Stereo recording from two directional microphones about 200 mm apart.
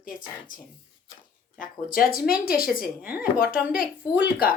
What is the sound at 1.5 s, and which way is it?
Speech, 45° left (ahead or behind).